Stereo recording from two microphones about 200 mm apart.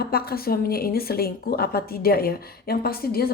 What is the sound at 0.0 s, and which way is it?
A woman's voice, 50° left (ahead or behind).